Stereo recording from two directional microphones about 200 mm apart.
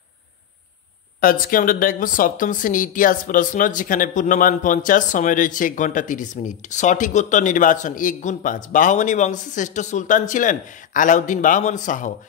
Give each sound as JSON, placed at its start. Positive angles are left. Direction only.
{"t": 1.2, "sound": "a woman's voice", "side_deg": 45}